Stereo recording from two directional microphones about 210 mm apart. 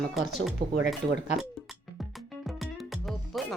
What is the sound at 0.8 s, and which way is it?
Speech, 50° right (ahead or behind).